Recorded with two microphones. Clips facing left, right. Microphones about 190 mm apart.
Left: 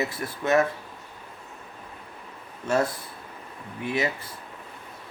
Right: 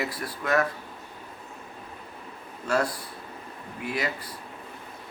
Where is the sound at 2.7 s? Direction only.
20° left (ahead or behind).